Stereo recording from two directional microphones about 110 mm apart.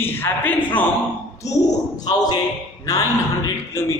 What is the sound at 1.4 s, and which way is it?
A man's voice, 30° left (ahead or behind).